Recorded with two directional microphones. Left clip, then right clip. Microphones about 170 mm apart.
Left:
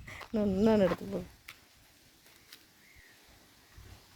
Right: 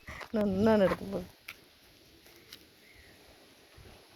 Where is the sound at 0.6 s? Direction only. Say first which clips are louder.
Right 1 dB; 25° left (ahead or behind).